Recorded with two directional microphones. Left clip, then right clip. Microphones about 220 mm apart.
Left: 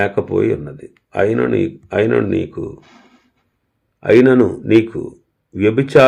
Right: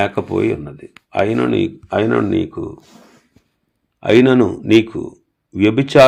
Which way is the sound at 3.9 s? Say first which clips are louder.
Left 1 dB; 35° right (ahead or behind).